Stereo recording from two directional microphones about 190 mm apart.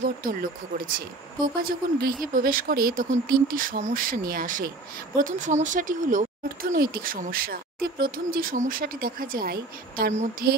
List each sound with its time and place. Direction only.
0.0 s speech: 45° right (ahead or behind)